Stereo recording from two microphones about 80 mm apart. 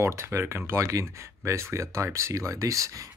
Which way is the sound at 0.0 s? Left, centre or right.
Right.